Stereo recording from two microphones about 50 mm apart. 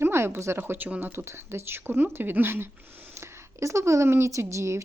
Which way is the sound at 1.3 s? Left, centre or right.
Right.